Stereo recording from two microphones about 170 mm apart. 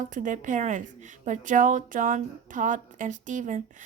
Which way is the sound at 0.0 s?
50° right (ahead or behind).